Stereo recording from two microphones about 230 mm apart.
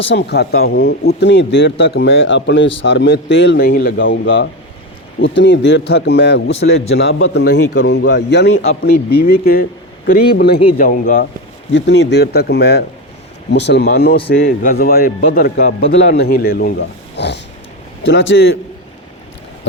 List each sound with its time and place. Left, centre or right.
0.0 s speech: left
8.8 s a man's voice: left
11.7 s a man's voice: left
15.9 s speech: left